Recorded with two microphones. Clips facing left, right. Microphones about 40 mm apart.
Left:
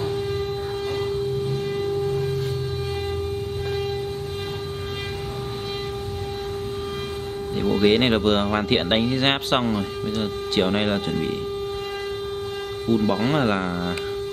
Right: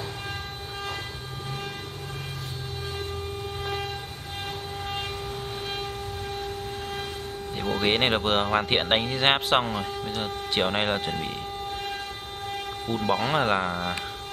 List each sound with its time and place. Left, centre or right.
7.8 s speech: centre
12.9 s speech: right
13.2 s speech: centre